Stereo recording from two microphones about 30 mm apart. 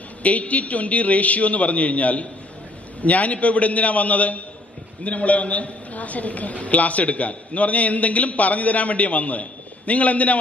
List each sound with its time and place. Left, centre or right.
0.2 s a man's voice: left